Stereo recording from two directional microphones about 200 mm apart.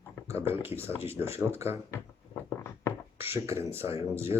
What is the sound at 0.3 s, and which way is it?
Speech, 10° right (ahead or behind).